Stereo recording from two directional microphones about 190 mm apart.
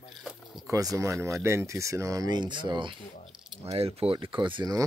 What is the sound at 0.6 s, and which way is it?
Speech, 15° right (ahead or behind).